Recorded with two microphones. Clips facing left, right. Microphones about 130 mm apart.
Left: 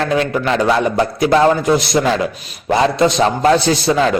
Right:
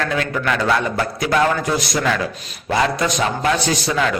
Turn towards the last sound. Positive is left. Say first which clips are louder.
# left 5 dB
turn(degrees=30)  # may be behind; listen again after turning